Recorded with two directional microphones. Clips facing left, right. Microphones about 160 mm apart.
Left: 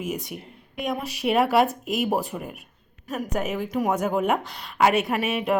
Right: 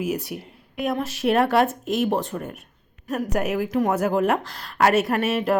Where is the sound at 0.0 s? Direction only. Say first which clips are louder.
Right 4 dB; 5° right (ahead or behind).